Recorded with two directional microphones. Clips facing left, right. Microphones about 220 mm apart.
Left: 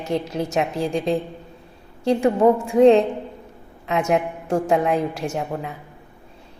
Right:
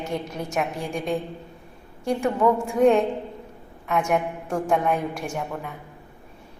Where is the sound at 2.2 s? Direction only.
25° left (ahead or behind).